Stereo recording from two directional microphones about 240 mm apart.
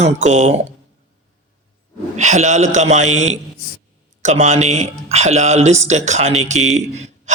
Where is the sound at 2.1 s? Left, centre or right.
Right.